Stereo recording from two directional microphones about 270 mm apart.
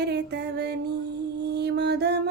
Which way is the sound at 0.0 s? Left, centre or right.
Right.